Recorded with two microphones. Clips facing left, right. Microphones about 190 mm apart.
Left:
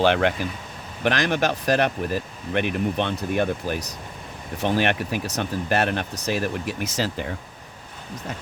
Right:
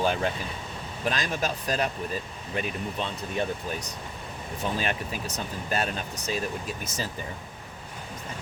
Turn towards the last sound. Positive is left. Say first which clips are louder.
# left 8 dB
turn(degrees=80)